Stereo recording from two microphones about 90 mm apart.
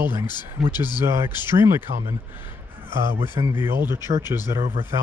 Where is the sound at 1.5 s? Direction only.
30° right (ahead or behind).